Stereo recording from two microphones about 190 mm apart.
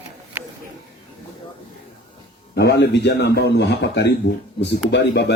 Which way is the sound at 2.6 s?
65° left (ahead or behind).